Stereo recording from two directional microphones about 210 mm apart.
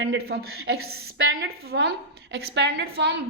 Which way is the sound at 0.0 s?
60° right (ahead or behind).